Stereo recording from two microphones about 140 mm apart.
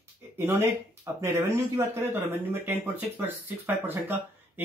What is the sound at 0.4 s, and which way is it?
Speech, 20° right (ahead or behind).